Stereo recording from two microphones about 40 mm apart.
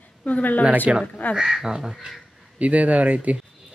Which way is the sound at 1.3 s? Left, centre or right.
Centre.